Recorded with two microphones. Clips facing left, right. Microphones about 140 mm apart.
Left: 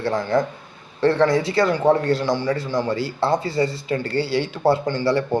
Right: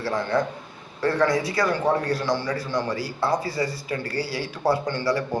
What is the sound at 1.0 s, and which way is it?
A man's voice, 25° left (ahead or behind).